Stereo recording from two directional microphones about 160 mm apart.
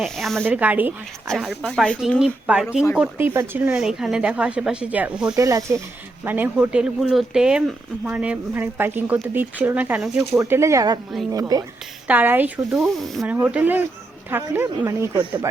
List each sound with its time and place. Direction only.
0.0 s speech: centre (ahead or behind)
0.4 s speech: 10° right (ahead or behind)
1.3 s speech: centre (ahead or behind)
5.4 s speech: 20° right (ahead or behind)
12.0 s speech: 10° right (ahead or behind)
12.7 s speech: centre (ahead or behind)
13.2 s speech: 10° right (ahead or behind)